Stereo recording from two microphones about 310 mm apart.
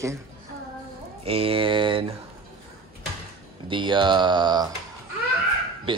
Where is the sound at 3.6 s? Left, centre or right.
Centre.